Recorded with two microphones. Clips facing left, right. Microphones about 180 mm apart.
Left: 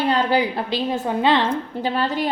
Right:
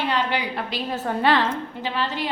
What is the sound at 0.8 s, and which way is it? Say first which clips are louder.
Speech: left 1 dB; 15° left (ahead or behind).